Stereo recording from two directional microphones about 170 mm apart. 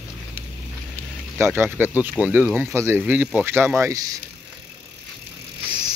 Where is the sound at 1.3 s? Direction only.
15° right (ahead or behind).